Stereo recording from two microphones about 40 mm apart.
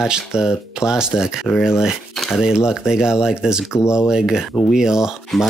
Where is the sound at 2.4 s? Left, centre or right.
Centre.